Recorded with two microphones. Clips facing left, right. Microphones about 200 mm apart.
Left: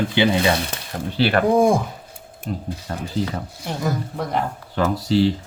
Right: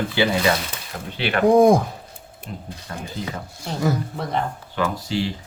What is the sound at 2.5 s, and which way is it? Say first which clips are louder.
Speech: left 7 dB; 40° left (ahead or behind).